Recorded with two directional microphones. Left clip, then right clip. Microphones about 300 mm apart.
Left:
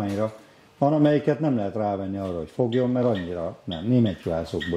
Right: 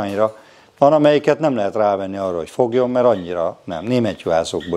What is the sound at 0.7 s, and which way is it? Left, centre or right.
A man's voice, centre.